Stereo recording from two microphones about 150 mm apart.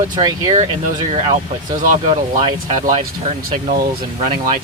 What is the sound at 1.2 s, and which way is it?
Speech, 60° right (ahead or behind).